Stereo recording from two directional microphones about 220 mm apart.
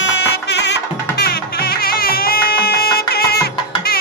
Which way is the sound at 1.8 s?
45° left (ahead or behind).